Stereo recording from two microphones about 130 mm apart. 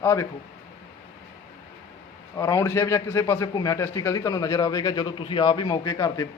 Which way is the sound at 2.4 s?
20° left (ahead or behind).